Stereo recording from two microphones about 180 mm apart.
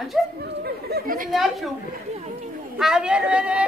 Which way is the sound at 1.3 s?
Centre (ahead or behind).